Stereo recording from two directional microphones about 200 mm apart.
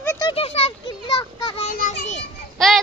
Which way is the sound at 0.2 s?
25° left (ahead or behind).